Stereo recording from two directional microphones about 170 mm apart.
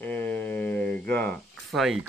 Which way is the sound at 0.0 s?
10° left (ahead or behind).